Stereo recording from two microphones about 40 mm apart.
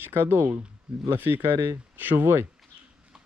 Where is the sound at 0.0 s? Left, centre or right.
Right.